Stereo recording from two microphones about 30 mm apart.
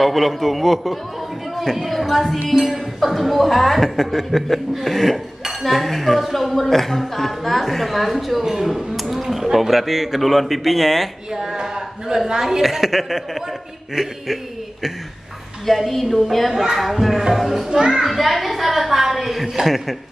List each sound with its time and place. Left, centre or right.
0.0 s a woman's voice: centre
11.3 s a child's voice: right
12.6 s a woman's voice: centre
13.9 s chuckle: centre
15.6 s a woman's voice: centre
17.6 s a child's voice: right
18.0 s a woman's voice: centre
18.7 s a sound: centre
19.6 s a woman's voice: centre